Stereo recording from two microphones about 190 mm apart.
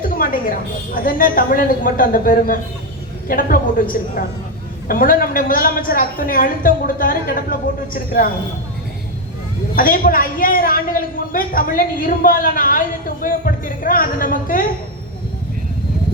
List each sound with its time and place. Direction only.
0.0 s a sound: 45° left (ahead or behind)
1.0 s a man's voice: 45° left (ahead or behind)
9.7 s a man's voice: 45° left (ahead or behind)